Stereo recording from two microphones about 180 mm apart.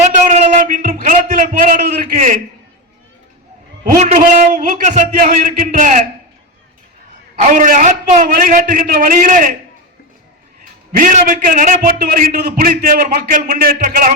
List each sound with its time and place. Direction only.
0.1 s a sound: 40° right (ahead or behind)
3.8 s a man's voice: 45° right (ahead or behind)
7.5 s a man's voice: 45° right (ahead or behind)
10.6 s a man's voice: 45° right (ahead or behind)